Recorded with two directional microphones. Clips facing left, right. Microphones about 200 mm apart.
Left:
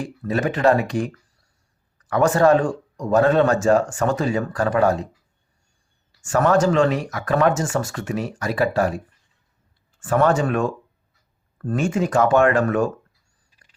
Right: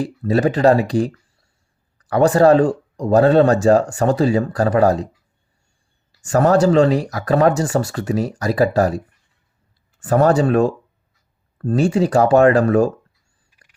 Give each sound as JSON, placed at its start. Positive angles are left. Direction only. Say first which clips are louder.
{"t": 0.0, "sound": "speech", "louder": "right 6 dB", "side_deg": -35}
{"t": 6.1, "sound": "speech", "louder": "right 4 dB", "side_deg": -35}
{"t": 10.0, "sound": "speech", "louder": "right 4 dB", "side_deg": -35}